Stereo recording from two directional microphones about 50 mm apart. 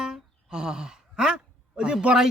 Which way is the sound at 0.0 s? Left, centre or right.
Centre.